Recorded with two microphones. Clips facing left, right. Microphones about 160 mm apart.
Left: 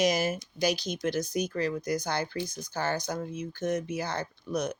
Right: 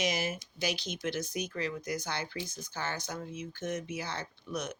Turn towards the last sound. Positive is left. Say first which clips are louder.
# left 6 dB
turn(degrees=40)  # may be behind; listen again after turning